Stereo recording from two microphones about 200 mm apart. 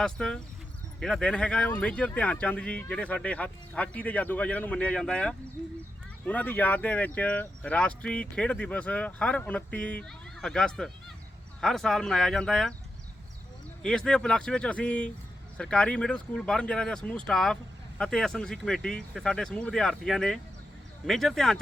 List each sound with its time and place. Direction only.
0.0 s speech: 5° left (ahead or behind)
13.8 s speech: 5° left (ahead or behind)